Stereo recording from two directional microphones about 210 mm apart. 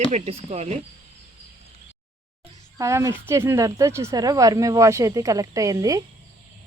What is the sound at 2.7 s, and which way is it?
Speech, 15° right (ahead or behind).